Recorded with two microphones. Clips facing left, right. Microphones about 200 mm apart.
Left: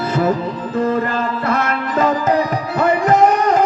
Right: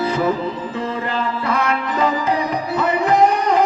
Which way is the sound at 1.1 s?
45° left (ahead or behind).